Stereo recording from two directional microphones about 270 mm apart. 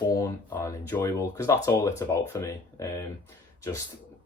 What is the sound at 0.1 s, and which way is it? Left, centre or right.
Speech, centre.